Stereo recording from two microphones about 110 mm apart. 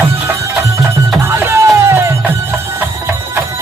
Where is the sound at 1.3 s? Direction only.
25° right (ahead or behind).